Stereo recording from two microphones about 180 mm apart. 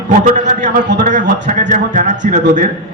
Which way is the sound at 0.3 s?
45° right (ahead or behind).